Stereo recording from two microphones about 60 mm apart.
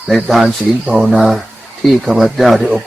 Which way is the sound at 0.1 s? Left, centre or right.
Centre.